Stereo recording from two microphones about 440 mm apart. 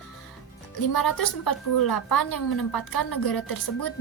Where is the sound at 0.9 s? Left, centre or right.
Left.